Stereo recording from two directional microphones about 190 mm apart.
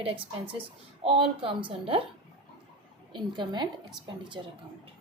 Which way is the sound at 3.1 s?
25° right (ahead or behind).